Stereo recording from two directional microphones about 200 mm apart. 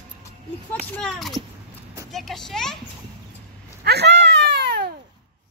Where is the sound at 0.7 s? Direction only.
5° left (ahead or behind).